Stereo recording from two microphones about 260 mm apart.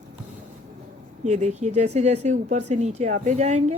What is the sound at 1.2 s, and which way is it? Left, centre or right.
Speech, right.